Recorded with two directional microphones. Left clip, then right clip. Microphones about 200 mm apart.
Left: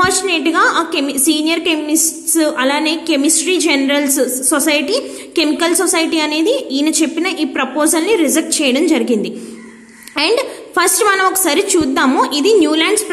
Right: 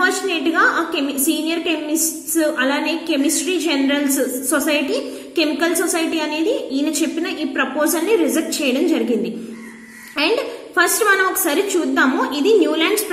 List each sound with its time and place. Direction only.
0.0 s a woman's voice: 40° left (ahead or behind)